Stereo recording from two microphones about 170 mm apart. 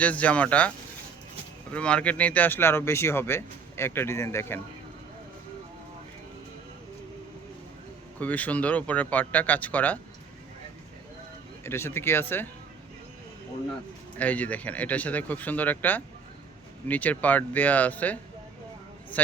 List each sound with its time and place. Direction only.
0.0 s speech: 10° left (ahead or behind)
1.7 s speech: 5° left (ahead or behind)
8.2 s speech: 10° left (ahead or behind)
11.6 s speech: 15° left (ahead or behind)
14.2 s speech: 10° left (ahead or behind)